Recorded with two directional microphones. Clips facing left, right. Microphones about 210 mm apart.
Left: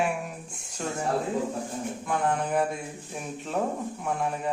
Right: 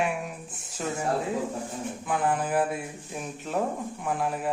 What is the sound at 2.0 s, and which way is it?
Speech, centre (ahead or behind).